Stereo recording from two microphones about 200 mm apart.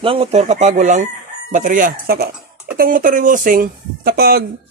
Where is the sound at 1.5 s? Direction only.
40° right (ahead or behind).